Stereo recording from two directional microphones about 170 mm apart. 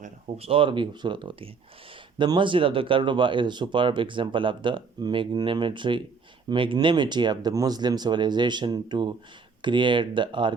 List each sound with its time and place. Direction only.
0.0 s speech: 35° right (ahead or behind)